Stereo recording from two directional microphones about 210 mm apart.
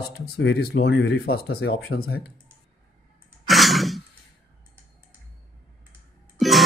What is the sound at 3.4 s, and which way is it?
Cough, centre (ahead or behind).